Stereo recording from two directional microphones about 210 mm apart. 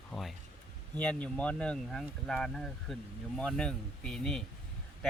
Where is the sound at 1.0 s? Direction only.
5° left (ahead or behind).